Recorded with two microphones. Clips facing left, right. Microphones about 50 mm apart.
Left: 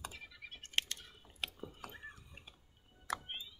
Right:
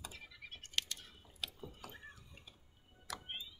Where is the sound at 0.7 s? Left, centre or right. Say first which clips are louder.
Left 3 dB; left.